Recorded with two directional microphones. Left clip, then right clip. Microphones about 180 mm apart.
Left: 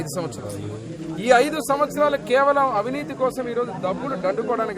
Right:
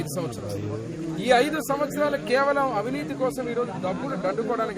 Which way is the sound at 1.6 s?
35° left (ahead or behind).